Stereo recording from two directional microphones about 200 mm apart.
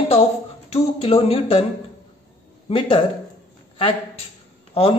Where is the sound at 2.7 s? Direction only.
25° left (ahead or behind).